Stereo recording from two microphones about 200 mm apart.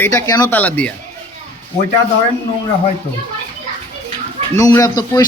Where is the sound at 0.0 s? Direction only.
15° left (ahead or behind).